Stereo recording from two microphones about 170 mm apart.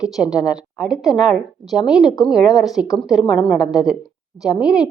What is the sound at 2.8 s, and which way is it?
Speech, 20° left (ahead or behind).